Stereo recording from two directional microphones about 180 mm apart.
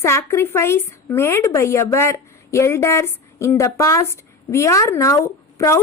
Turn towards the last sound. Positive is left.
turn(degrees=15)  # may be behind; listen again after turning